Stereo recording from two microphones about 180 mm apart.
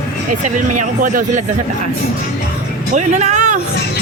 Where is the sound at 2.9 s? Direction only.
40° right (ahead or behind).